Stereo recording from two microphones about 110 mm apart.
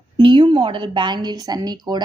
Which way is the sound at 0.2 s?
50° right (ahead or behind).